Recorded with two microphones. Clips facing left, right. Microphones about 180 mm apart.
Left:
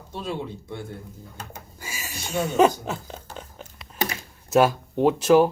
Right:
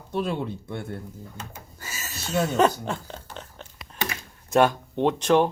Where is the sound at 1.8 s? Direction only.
10° left (ahead or behind).